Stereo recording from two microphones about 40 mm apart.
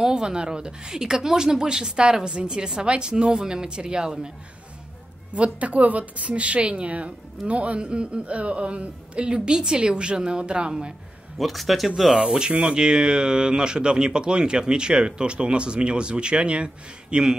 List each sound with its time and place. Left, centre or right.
0.0 s speech: centre
5.3 s speech: right
11.3 s a man's voice: centre
12.3 s speech: right